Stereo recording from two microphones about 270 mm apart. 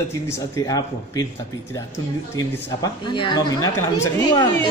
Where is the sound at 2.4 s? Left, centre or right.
Centre.